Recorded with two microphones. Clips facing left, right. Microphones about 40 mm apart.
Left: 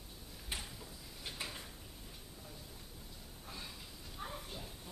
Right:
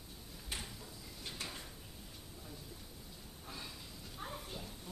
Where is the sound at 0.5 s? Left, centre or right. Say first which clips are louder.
Even; centre.